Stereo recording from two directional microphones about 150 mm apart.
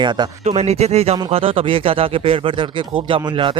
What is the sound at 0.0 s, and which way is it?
Speech, 30° right (ahead or behind).